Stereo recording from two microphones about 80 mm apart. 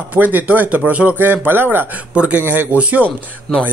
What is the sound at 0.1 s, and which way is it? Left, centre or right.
Speech, right.